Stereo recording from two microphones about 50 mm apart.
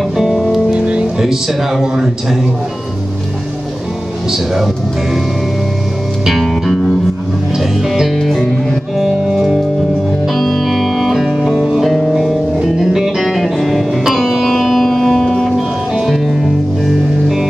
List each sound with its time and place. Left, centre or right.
0.2 s music: centre
0.7 s music: right
1.1 s speech: centre
6.2 s music: centre
10.2 s music: centre